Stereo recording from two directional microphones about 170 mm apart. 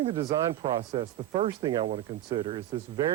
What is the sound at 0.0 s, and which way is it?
Speech, 30° right (ahead or behind).